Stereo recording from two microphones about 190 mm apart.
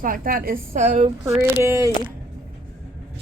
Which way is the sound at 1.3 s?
15° right (ahead or behind).